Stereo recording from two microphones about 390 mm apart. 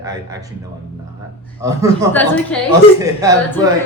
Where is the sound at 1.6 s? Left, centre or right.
Centre.